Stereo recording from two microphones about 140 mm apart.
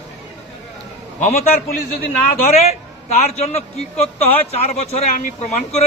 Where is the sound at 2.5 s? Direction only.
50° left (ahead or behind).